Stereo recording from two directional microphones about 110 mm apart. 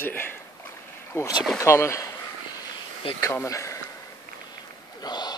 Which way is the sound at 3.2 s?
25° left (ahead or behind).